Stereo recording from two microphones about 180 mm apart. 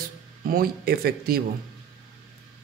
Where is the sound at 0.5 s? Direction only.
55° right (ahead or behind).